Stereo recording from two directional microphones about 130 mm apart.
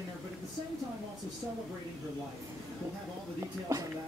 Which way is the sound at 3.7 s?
20° right (ahead or behind).